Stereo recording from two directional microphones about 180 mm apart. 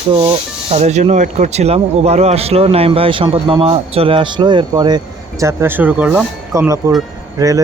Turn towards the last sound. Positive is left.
turn(degrees=-20)  # may be behind; listen again after turning